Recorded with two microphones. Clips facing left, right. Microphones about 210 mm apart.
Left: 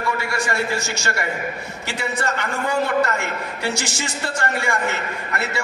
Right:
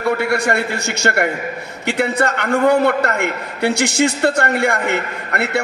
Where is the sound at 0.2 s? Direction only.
60° right (ahead or behind).